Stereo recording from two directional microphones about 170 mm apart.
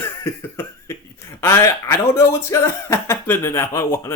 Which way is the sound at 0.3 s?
15° left (ahead or behind).